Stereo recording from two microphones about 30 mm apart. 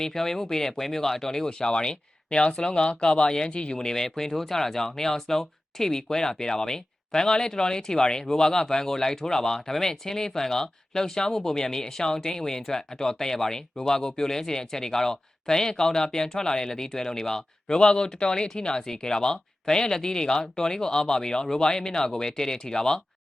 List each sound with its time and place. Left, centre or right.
0.0 s speech: centre
1.5 s speech: left
17.7 s speech: left